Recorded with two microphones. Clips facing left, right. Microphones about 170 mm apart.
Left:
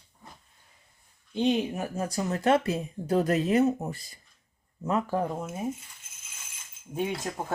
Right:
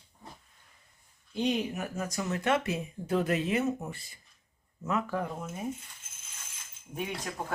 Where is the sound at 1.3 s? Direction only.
25° left (ahead or behind).